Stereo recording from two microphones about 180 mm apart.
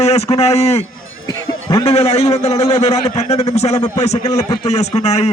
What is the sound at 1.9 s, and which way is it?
A man's voice, 35° left (ahead or behind).